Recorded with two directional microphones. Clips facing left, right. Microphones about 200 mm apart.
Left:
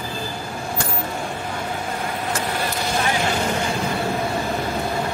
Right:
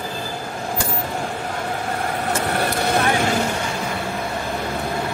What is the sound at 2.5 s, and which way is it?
Vehicle, 60° right (ahead or behind).